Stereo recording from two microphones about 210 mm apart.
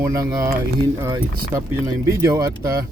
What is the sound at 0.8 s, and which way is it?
Speech, 15° right (ahead or behind).